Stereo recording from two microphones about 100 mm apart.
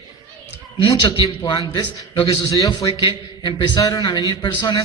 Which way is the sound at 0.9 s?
45° left (ahead or behind).